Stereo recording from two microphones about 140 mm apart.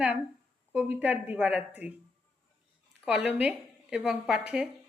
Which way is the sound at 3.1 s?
10° right (ahead or behind).